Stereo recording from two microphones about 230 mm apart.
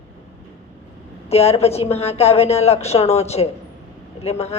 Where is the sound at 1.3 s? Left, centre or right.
Left.